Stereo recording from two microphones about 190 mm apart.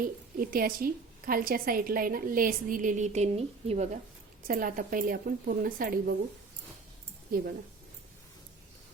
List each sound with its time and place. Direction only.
0.0 s a woman's voice: 50° right (ahead or behind)
4.4 s a woman's voice: 45° right (ahead or behind)
7.3 s a woman's voice: 50° right (ahead or behind)